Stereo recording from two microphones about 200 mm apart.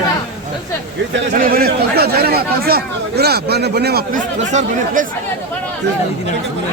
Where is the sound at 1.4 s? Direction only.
50° right (ahead or behind).